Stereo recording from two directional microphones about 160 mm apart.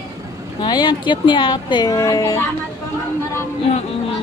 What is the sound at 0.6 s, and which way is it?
A woman's voice, 25° left (ahead or behind).